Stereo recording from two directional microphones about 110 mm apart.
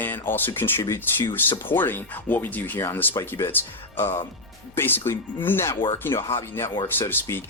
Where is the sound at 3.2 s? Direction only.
30° left (ahead or behind).